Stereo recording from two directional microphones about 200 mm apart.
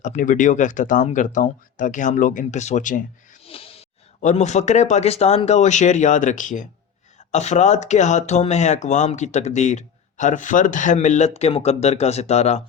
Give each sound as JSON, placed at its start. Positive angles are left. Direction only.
{"t": 0.0, "sound": "speech", "side_deg": 40}